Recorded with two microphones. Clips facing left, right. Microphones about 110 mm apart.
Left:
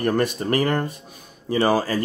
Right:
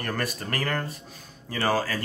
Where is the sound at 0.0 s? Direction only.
20° left (ahead or behind).